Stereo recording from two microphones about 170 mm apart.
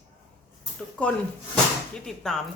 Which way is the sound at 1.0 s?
5° left (ahead or behind).